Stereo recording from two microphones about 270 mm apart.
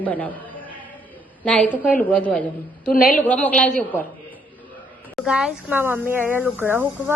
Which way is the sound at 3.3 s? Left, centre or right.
Centre.